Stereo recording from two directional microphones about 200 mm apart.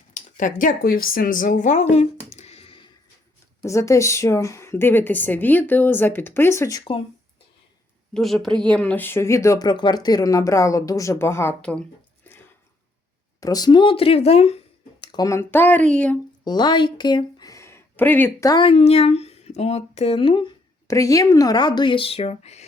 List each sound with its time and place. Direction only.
0.1 s speech: 40° left (ahead or behind)
3.6 s speech: 15° left (ahead or behind)
8.1 s speech: centre (ahead or behind)
12.3 s a sound: 10° left (ahead or behind)
13.4 s speech: 20° left (ahead or behind)
15.0 s speech: 20° left (ahead or behind)
16.4 s a woman's voice: 20° left (ahead or behind)